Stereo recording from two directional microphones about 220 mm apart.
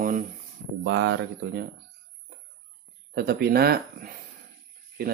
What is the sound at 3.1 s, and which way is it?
A man's voice, 45° right (ahead or behind).